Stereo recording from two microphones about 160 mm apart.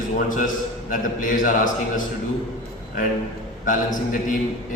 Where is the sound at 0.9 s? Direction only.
55° left (ahead or behind).